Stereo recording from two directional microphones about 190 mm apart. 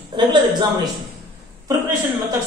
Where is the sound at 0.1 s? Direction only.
25° right (ahead or behind).